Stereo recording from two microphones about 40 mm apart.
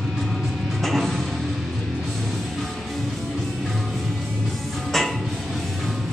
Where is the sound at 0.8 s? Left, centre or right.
Centre.